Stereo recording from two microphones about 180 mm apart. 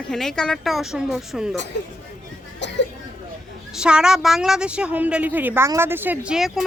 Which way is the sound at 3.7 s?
5° right (ahead or behind).